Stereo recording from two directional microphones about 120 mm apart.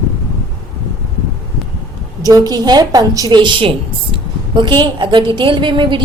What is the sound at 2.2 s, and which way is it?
A woman's voice, 30° right (ahead or behind).